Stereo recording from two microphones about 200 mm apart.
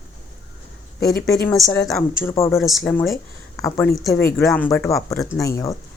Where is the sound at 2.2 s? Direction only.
15° left (ahead or behind).